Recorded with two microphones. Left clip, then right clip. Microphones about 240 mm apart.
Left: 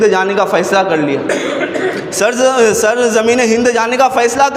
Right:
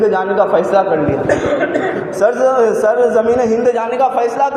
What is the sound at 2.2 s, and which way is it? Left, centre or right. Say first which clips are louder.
A man's voice: left 1 dB; left.